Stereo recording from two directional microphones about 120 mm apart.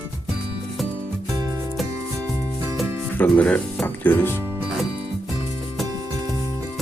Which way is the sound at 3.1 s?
10° left (ahead or behind).